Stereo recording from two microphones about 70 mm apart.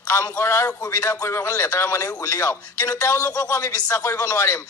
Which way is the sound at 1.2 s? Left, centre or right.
Left.